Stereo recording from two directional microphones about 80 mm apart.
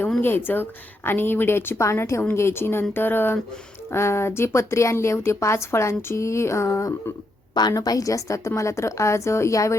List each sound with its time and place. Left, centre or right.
0.2 s a woman's voice: left
7.7 s a woman's voice: left